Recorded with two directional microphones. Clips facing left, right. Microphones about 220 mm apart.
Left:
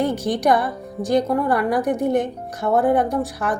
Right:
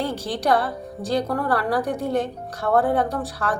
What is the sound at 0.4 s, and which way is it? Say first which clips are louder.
A woman's voice: left 1 dB; 15° left (ahead or behind).